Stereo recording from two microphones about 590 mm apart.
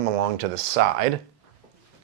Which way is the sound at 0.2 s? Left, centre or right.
Right.